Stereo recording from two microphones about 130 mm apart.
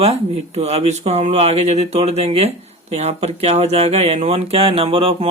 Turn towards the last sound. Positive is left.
turn(degrees=-45)  # may be behind; listen again after turning